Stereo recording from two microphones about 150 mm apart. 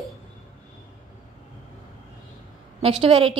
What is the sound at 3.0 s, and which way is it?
Speech, 35° right (ahead or behind).